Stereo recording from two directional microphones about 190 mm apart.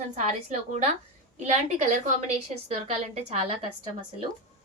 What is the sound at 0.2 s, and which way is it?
A woman's voice, 35° right (ahead or behind).